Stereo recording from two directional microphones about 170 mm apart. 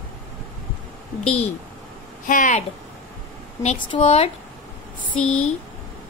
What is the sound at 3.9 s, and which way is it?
Speech, 40° left (ahead or behind).